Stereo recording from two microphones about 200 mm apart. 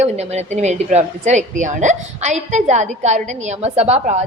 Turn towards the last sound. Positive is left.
turn(degrees=-35)  # may be behind; listen again after turning